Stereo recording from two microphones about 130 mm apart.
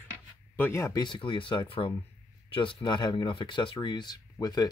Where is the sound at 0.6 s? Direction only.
20° left (ahead or behind).